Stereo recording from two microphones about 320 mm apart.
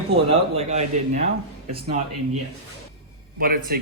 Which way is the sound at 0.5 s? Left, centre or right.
Centre.